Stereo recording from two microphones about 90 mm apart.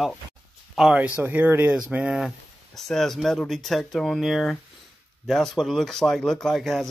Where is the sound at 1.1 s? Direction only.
20° right (ahead or behind).